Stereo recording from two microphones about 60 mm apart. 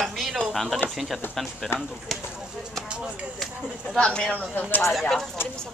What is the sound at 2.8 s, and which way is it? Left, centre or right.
Speech, centre.